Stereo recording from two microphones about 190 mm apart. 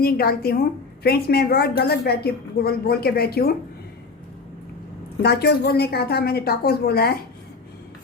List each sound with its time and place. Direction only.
0.0 s a woman's voice: 55° left (ahead or behind)
5.2 s a woman's voice: 55° left (ahead or behind)